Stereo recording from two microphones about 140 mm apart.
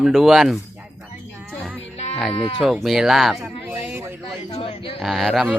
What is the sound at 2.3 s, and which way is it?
Speech, 45° left (ahead or behind).